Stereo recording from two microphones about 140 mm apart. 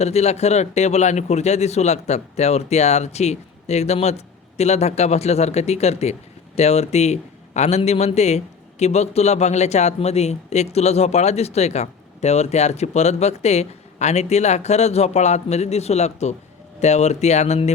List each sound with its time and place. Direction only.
0.0 s speech: 50° left (ahead or behind)